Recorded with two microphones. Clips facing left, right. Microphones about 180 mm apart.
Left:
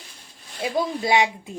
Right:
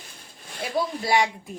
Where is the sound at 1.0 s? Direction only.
20° left (ahead or behind).